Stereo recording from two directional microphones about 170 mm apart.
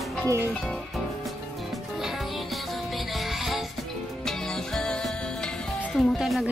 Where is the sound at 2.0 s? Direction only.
Centre (ahead or behind).